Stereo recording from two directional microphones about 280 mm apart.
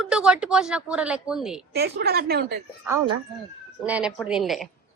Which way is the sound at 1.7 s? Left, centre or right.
Right.